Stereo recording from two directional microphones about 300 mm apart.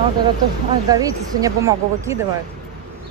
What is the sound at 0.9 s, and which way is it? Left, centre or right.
A woman's voice, centre.